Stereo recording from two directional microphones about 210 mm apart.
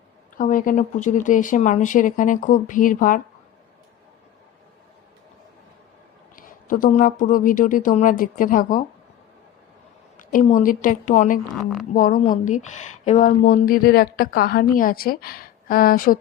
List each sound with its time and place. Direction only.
0.3 s speech: 40° left (ahead or behind)
6.3 s speech: 40° left (ahead or behind)
10.2 s speech: 40° left (ahead or behind)
11.5 s speech: centre (ahead or behind)
11.9 s speech: 40° left (ahead or behind)